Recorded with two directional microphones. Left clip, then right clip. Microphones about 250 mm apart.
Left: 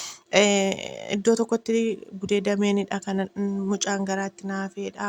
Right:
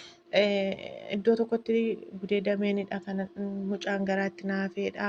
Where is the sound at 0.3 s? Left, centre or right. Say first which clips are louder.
Left 5 dB; left.